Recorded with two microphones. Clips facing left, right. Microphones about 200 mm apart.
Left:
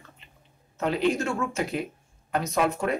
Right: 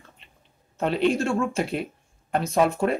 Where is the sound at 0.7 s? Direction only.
30° right (ahead or behind).